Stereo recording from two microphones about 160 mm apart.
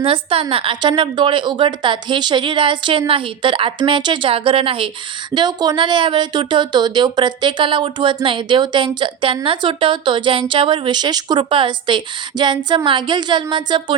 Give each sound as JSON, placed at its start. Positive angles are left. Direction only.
{"t": 0.0, "sound": "a woman's voice", "side_deg": -35}